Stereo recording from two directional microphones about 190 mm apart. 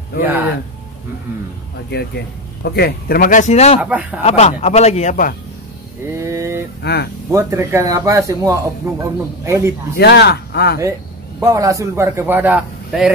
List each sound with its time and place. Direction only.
1.9 s speech: 60° left (ahead or behind); by 3.8 s 35° left (ahead or behind)
3.8 s speech: 5° right (ahead or behind)
4.2 s speech: 35° left (ahead or behind)
6.2 s a sound: 15° right (ahead or behind)
6.8 s speech: 60° left (ahead or behind)
7.2 s speech: 15° right (ahead or behind)
9.9 s speech: 60° left (ahead or behind)
10.8 s a man's voice: 15° right (ahead or behind)